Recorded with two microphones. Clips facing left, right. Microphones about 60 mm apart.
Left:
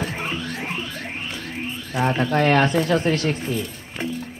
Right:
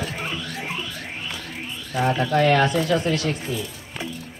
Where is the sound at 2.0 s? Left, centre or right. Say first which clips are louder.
Even; left.